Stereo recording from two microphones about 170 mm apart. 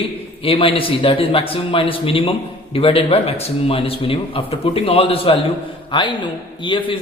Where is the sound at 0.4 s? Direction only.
35° left (ahead or behind).